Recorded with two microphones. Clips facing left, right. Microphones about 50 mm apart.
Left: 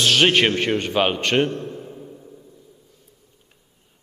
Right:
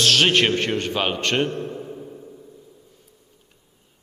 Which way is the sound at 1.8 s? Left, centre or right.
Centre.